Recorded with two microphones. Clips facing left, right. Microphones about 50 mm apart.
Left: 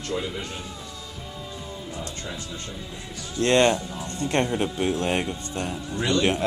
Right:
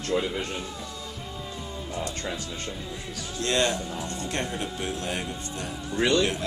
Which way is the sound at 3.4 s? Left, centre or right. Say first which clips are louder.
Left 6 dB; left.